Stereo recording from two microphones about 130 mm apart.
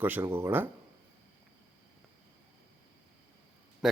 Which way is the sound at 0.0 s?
15° right (ahead or behind).